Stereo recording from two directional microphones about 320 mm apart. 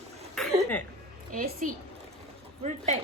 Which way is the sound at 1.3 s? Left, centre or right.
Right.